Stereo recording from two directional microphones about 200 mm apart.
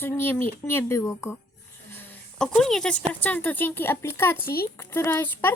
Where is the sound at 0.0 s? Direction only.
10° left (ahead or behind).